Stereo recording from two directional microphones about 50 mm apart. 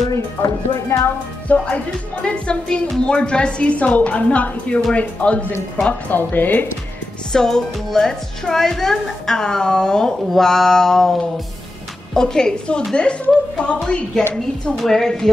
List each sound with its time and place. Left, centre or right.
0.1 s speech: left
1.5 s speech: left
2.2 s a woman's voice: centre
6.1 s speech: left
7.3 s a woman's voice: centre